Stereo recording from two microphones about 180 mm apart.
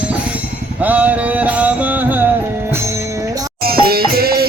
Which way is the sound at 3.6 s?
55° right (ahead or behind).